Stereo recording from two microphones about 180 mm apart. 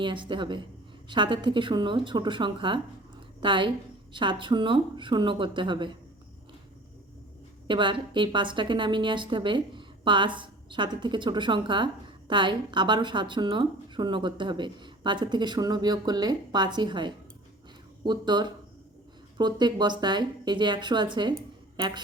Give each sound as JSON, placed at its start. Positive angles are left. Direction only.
{"t": 0.0, "sound": "a woman's voice", "side_deg": -25}
{"t": 7.7, "sound": "a woman's voice", "side_deg": -25}